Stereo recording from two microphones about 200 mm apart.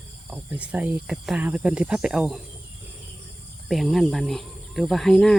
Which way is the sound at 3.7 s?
Centre (ahead or behind).